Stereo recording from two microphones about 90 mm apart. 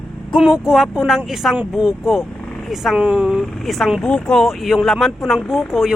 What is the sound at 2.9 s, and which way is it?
Speech, 15° right (ahead or behind).